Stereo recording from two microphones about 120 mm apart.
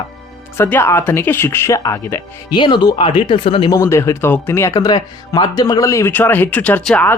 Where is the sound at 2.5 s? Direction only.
40° left (ahead or behind).